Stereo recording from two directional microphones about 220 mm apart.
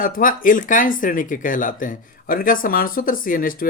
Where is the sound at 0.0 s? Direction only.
40° left (ahead or behind).